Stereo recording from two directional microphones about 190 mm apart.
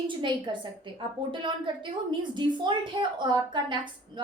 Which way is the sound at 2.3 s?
25° right (ahead or behind).